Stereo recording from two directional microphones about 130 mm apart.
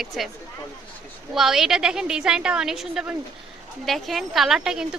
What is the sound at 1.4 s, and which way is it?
A woman's voice, 5° right (ahead or behind).